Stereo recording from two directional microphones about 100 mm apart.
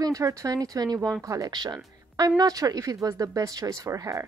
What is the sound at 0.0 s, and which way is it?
Speech, 35° right (ahead or behind).